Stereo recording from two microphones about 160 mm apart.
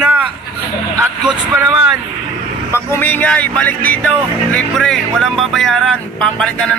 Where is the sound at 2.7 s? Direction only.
15° left (ahead or behind).